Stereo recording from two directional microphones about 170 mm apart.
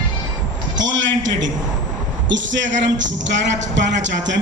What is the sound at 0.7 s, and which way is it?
Speech, 90° right.